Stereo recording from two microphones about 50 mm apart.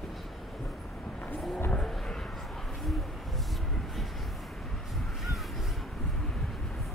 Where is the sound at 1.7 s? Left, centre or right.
Centre.